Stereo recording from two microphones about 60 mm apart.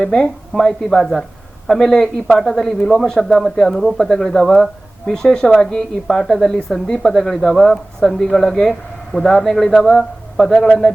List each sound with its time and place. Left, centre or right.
0.0 s speech: centre